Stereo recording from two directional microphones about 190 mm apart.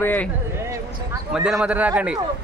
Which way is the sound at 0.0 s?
10° left (ahead or behind).